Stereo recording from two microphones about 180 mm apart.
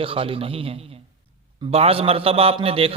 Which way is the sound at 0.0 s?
30° right (ahead or behind).